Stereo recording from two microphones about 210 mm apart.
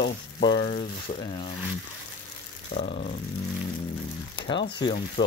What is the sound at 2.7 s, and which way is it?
Speech, 30° left (ahead or behind).